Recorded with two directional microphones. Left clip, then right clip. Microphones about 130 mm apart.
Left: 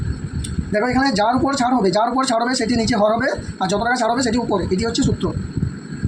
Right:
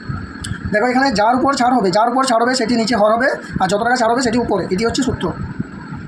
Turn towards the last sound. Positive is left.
turn(degrees=-45)  # may be behind; listen again after turning